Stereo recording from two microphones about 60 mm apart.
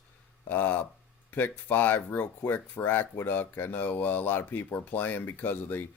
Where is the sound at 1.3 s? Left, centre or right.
Left.